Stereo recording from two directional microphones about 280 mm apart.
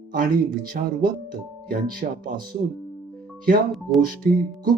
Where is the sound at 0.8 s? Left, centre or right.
Right.